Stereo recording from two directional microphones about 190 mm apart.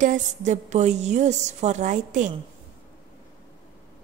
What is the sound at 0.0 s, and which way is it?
A woman's voice, 40° right (ahead or behind).